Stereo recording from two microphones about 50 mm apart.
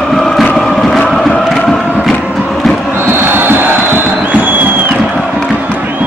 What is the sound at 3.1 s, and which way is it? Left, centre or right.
Vehicle, right.